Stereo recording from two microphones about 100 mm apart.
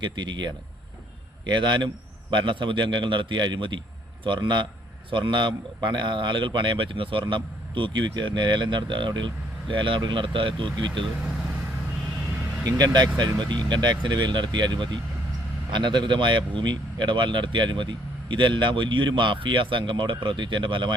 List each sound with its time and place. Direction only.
0.0 s a man's voice: 50° right (ahead or behind)
11.2 s vehicle: 5° right (ahead or behind)
12.6 s a man's voice: 45° right (ahead or behind)